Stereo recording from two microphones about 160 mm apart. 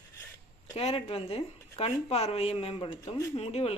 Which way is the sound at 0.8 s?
40° left (ahead or behind).